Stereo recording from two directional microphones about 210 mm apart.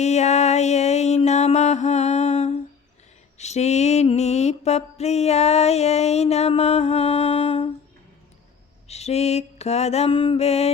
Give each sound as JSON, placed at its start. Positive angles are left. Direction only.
{"t": 0.0, "sound": "music", "side_deg": 30}
{"t": 3.3, "sound": "mantra", "side_deg": 30}
{"t": 8.9, "sound": "mantra", "side_deg": 30}